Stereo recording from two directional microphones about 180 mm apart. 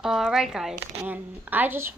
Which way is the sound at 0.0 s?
Centre (ahead or behind).